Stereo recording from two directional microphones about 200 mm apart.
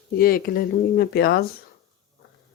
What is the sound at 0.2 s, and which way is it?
Speech, 50° left (ahead or behind).